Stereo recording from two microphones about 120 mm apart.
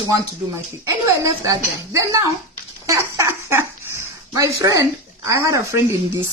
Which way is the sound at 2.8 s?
25° right (ahead or behind).